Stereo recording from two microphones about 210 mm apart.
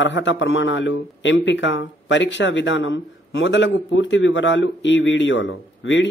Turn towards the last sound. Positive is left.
turn(degrees=60)  # may be behind; listen again after turning